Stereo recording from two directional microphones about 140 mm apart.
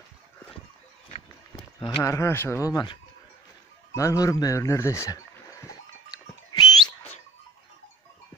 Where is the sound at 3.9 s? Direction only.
25° left (ahead or behind).